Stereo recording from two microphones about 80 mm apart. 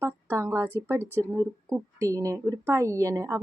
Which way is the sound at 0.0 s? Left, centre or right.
Right.